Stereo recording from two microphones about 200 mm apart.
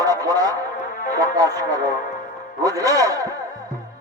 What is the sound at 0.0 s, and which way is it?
Music, 20° right (ahead or behind).